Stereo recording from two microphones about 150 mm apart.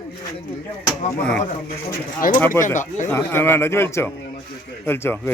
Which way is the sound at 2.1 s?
65° left (ahead or behind).